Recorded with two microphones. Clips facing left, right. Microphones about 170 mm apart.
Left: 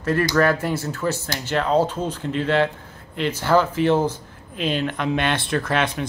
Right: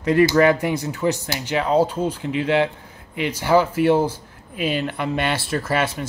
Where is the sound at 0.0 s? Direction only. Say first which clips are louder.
Right 4 dB; 15° right (ahead or behind).